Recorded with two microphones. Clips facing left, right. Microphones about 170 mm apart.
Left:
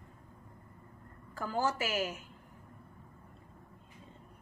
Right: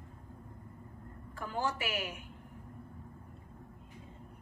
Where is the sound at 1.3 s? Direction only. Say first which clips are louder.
Left 3 dB; 40° left (ahead or behind).